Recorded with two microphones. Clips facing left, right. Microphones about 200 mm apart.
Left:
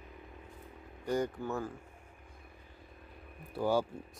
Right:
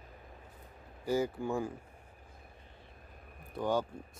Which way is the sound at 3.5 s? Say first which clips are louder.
Left 2 dB; 10° left (ahead or behind).